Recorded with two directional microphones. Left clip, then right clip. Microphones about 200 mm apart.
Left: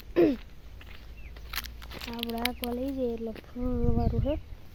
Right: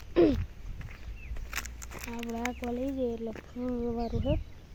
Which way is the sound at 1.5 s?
15° right (ahead or behind).